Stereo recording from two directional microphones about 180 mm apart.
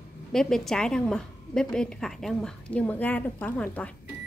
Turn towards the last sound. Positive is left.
turn(degrees=10)  # may be behind; listen again after turning